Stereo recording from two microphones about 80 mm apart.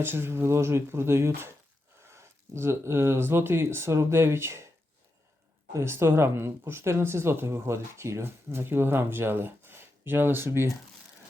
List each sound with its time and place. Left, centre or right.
0.0 s speech: right
5.7 s speech: right